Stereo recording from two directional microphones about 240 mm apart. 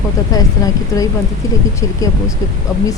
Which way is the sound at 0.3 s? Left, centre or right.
Centre.